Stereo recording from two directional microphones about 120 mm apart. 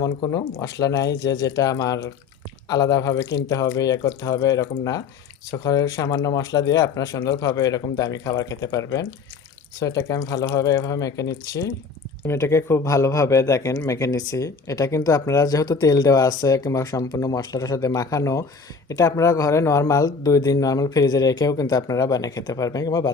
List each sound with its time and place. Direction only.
0.0 s a man's voice: 35° left (ahead or behind)